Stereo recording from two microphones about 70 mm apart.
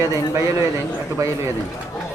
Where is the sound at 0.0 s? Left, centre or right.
Right.